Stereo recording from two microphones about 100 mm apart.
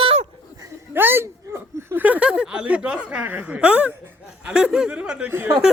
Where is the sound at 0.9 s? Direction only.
20° right (ahead or behind).